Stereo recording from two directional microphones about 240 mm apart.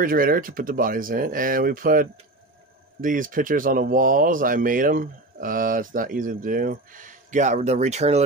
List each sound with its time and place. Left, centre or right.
0.0 s speech: right